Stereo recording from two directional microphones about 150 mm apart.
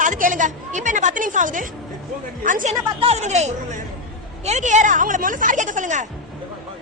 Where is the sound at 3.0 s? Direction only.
45° right (ahead or behind).